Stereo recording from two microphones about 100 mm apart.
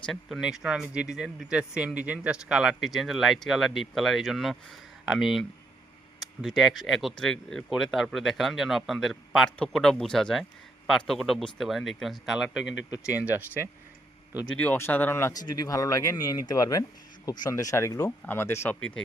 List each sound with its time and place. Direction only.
0.0 s speech: centre (ahead or behind)
13.1 s speech: 15° right (ahead or behind)
14.5 s speech: 15° left (ahead or behind)
15.3 s speech: 40° left (ahead or behind)
17.5 s speech: 35° left (ahead or behind)
18.8 s speech: 10° left (ahead or behind)